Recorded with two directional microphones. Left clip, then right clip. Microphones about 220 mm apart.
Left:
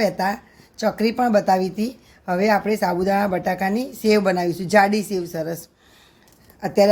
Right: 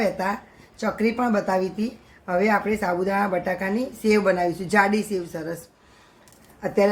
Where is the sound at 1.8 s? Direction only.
45° left (ahead or behind).